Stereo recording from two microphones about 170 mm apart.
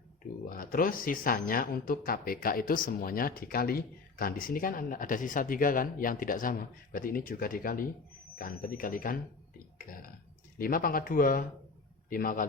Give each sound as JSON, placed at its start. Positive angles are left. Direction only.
{"t": 0.4, "sound": "speech", "side_deg": 55}